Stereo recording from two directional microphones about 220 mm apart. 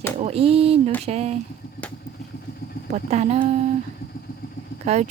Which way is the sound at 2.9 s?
30° right (ahead or behind).